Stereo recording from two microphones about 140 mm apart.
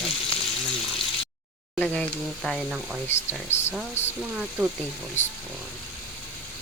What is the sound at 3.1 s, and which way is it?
Speech, 15° left (ahead or behind).